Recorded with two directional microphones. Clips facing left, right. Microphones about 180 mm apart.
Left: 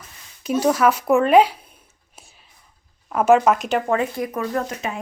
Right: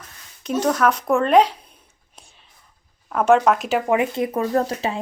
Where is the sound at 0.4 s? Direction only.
5° left (ahead or behind).